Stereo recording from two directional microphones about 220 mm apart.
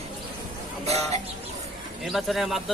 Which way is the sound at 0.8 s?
30° right (ahead or behind).